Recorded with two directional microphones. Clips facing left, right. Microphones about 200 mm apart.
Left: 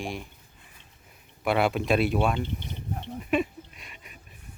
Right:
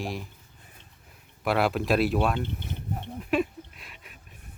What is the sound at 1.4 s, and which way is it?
Speech, centre (ahead or behind).